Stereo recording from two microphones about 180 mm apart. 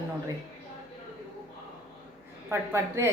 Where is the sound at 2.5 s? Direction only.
15° right (ahead or behind).